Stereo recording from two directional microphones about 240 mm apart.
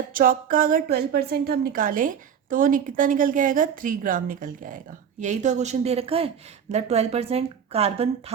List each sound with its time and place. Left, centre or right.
0.1 s a woman's voice: right